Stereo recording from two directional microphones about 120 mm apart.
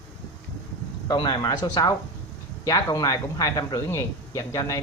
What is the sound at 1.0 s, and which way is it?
Speech, 40° left (ahead or behind).